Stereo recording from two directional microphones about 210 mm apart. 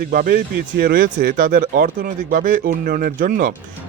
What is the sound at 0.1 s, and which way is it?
A man's voice, 40° right (ahead or behind).